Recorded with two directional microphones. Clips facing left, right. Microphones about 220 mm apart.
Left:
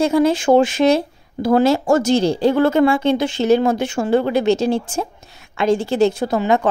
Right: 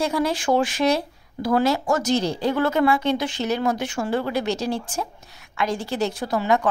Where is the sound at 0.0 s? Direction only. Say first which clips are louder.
Left 8 dB; 25° left (ahead or behind).